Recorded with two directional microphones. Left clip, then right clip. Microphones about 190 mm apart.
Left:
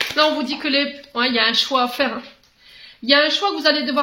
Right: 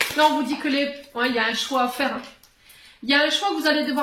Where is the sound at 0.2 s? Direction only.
45° left (ahead or behind).